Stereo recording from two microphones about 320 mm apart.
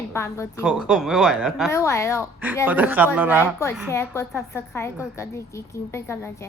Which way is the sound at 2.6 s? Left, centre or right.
Centre.